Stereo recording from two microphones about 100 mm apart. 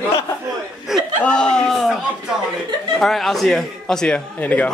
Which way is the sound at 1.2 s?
10° left (ahead or behind).